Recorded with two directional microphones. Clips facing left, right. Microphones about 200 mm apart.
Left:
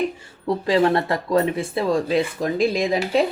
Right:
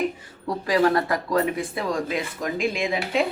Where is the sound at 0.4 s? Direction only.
25° left (ahead or behind).